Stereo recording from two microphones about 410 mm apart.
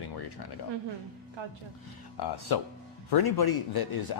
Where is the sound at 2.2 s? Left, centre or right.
Left.